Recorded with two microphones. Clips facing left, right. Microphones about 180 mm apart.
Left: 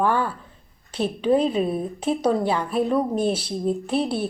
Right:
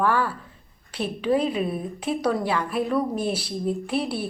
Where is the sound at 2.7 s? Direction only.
5° right (ahead or behind).